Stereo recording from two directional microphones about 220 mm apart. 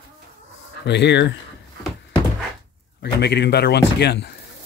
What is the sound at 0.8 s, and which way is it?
Speech, 50° left (ahead or behind).